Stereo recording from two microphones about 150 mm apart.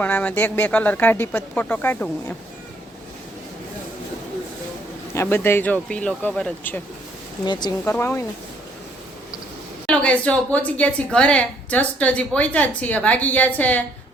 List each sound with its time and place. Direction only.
0.0 s a woman's voice: 10° left (ahead or behind)
5.1 s a woman's voice: 15° left (ahead or behind)
7.4 s speech: 30° left (ahead or behind)
7.9 s a woman's voice: 15° left (ahead or behind)
9.8 s a woman's voice: 5° left (ahead or behind)